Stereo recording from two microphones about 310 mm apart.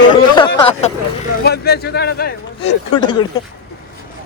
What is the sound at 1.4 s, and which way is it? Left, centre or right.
Speech, left.